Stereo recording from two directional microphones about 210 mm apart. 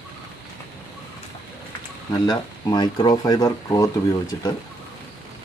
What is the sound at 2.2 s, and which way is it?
Speech, 20° left (ahead or behind).